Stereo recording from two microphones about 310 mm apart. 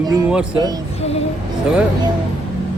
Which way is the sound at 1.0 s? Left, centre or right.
Centre.